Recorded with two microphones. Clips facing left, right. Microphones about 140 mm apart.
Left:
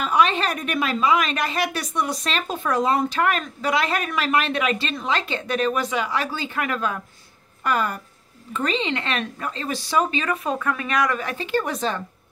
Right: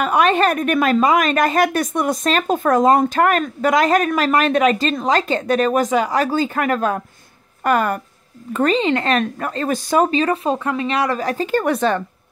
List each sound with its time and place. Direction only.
0.0 s a woman's voice: 55° right (ahead or behind)
10.2 s speech: 30° right (ahead or behind)
11.6 s a woman's voice: 60° right (ahead or behind)